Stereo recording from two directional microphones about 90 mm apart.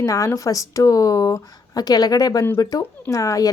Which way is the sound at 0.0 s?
40° left (ahead or behind).